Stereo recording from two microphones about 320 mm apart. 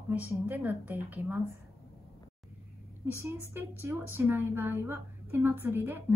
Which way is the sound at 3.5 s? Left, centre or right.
Centre.